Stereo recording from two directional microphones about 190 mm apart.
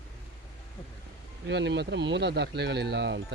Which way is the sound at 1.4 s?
65° right (ahead or behind).